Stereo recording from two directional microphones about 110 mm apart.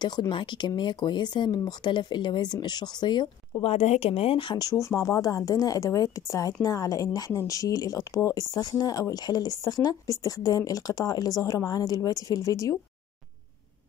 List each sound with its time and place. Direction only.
0.0 s speech: 40° left (ahead or behind)
3.6 s speech: 75° left (ahead or behind); by 4.6 s 50° left (ahead or behind)
4.6 s speech: 30° left (ahead or behind)